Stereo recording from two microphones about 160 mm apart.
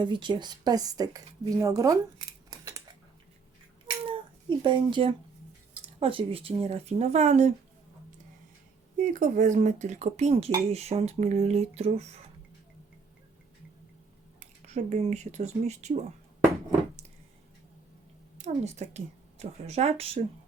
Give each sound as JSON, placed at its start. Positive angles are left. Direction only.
{"t": 0.0, "sound": "speech", "side_deg": -30}
{"t": 4.1, "sound": "a child's voice", "side_deg": -30}
{"t": 9.0, "sound": "speech", "side_deg": -55}
{"t": 14.3, "sound": "speech", "side_deg": -45}
{"t": 18.3, "sound": "a woman's voice", "side_deg": -45}